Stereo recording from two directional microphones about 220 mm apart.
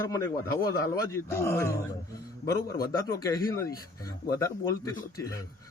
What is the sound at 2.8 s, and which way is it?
Speech, 15° left (ahead or behind).